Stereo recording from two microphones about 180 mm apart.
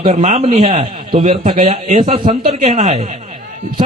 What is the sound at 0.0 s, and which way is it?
A man's voice, 40° right (ahead or behind).